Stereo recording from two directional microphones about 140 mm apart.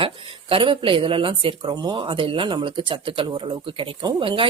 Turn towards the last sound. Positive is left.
turn(degrees=-40)  # may be behind; listen again after turning